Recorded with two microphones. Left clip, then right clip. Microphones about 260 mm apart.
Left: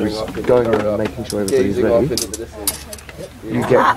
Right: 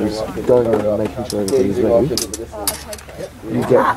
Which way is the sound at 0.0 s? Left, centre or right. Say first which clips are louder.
Even; centre.